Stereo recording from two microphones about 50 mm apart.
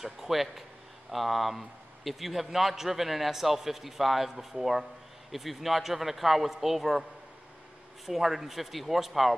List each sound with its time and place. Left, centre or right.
0.0 s a man's voice: centre
8.1 s a man's voice: centre